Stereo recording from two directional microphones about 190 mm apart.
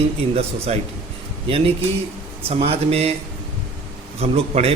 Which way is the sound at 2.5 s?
30° right (ahead or behind).